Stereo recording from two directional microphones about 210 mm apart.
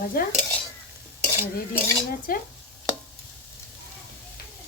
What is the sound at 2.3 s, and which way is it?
Dishes, 45° left (ahead or behind).